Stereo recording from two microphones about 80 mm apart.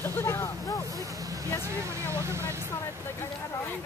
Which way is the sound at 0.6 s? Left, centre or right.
Left.